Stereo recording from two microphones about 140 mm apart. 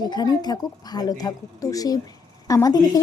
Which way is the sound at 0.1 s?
30° left (ahead or behind).